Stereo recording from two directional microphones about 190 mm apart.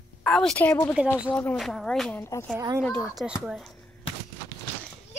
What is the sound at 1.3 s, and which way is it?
A woman's voice, 5° left (ahead or behind).